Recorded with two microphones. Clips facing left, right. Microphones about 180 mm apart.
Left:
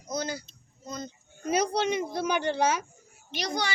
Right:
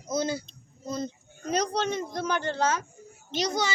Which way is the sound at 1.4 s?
10° left (ahead or behind).